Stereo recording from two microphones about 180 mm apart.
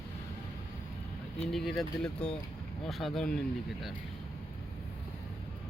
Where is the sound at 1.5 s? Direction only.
Centre (ahead or behind).